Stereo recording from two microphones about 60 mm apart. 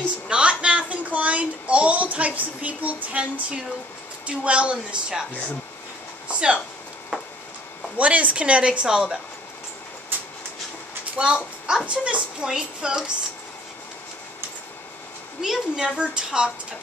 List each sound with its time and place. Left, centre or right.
0.3 s a sound: centre
4.3 s a woman's voice: centre
6.2 s a sound: centre
8.0 s a woman's voice: right
11.1 s a woman's voice: centre
15.4 s a woman's voice: centre